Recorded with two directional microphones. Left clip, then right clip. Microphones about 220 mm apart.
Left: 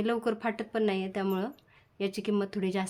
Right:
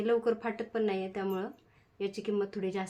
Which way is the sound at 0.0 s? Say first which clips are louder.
Right 1 dB; 40° left (ahead or behind).